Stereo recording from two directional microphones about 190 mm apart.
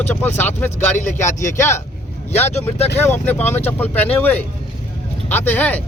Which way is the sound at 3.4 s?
35° left (ahead or behind).